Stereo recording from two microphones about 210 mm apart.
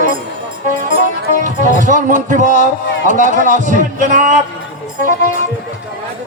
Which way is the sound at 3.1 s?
40° right (ahead or behind).